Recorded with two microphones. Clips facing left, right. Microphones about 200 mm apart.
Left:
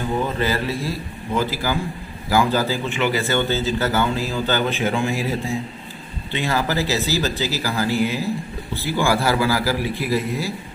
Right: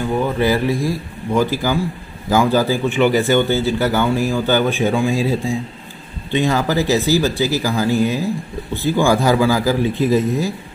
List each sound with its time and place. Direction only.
0.4 s speech: 15° right (ahead or behind)